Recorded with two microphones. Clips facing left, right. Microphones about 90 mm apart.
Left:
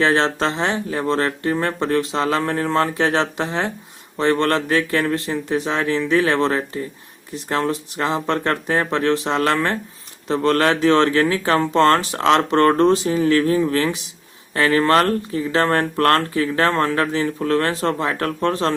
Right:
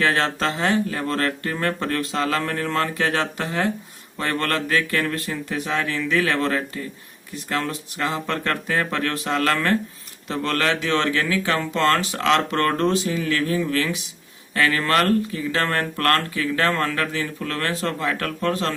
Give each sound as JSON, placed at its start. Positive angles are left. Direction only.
{"t": 0.0, "sound": "speech", "side_deg": 30}